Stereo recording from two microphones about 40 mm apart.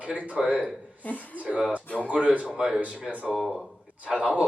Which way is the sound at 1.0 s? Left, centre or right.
Left.